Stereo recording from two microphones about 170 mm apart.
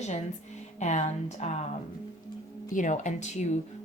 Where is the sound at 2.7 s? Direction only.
45° left (ahead or behind).